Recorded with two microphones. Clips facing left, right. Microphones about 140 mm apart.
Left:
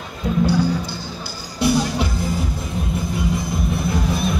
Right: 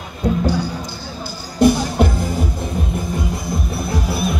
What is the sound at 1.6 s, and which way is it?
Music, 50° right (ahead or behind).